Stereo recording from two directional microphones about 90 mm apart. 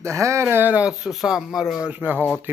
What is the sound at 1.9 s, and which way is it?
Speech, 20° right (ahead or behind).